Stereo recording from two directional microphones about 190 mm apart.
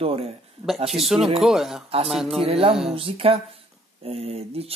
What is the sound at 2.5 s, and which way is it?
Speech, 30° right (ahead or behind).